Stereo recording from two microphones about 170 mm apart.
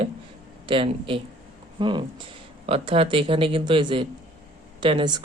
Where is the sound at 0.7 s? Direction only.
30° right (ahead or behind).